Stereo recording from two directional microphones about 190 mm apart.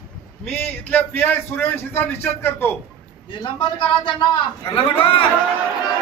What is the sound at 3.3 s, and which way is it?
A man's voice, 25° left (ahead or behind).